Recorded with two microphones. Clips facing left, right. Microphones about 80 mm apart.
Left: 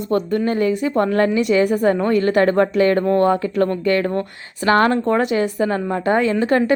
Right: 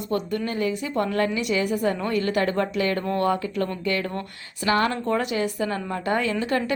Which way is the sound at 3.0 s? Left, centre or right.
Left.